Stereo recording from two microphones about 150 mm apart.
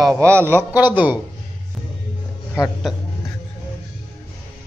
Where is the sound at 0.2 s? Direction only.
15° right (ahead or behind).